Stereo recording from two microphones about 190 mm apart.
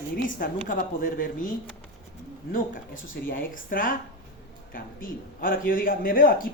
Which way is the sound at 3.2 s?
50° left (ahead or behind).